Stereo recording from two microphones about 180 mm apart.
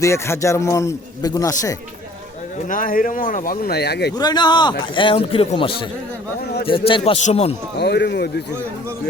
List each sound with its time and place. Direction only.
0.0 s a man's voice: 15° left (ahead or behind)
2.6 s speech: 50° left (ahead or behind); by 4.1 s 65° left (ahead or behind)
4.2 s a man's voice: 25° left (ahead or behind)
7.8 s speech: 65° left (ahead or behind)